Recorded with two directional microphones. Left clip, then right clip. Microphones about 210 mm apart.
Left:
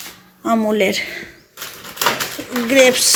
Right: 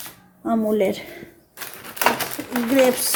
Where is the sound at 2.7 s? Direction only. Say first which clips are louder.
Left 6 dB; centre (ahead or behind).